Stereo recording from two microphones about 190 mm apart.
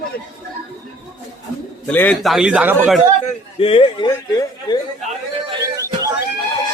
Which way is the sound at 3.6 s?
30° left (ahead or behind).